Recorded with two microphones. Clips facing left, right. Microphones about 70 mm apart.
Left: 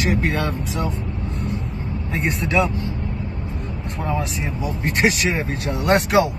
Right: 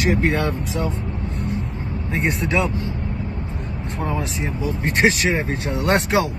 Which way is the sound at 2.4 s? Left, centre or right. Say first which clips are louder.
Left 1 dB; right.